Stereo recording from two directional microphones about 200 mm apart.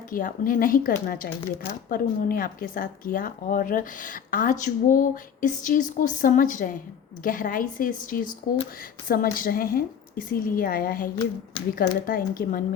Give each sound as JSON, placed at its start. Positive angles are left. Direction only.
{"t": 0.1, "sound": "speech", "side_deg": 45}